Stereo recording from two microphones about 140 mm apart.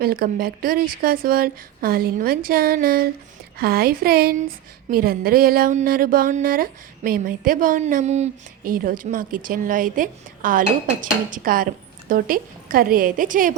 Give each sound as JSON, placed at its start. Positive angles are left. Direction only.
{"t": 0.0, "sound": "speech", "side_deg": -90}
{"t": 8.6, "sound": "a woman's voice", "side_deg": -90}